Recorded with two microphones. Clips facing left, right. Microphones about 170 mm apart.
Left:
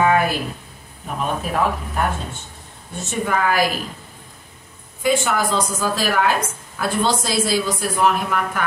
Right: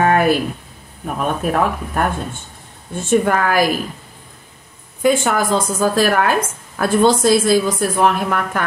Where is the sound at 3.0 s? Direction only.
50° right (ahead or behind).